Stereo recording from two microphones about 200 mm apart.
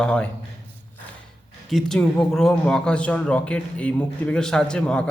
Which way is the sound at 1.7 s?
5° left (ahead or behind).